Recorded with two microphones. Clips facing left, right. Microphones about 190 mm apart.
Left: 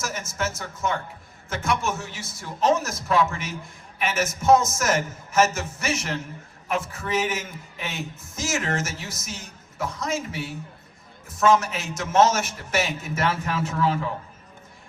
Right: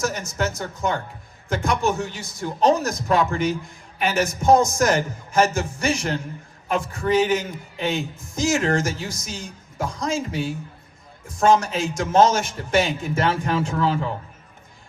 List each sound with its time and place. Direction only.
0.0 s a man's voice: 35° right (ahead or behind)